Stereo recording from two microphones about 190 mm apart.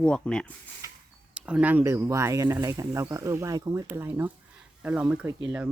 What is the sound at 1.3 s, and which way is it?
Speech, 5° right (ahead or behind).